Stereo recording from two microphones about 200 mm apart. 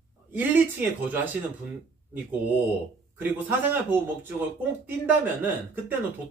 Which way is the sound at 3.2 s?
10° right (ahead or behind).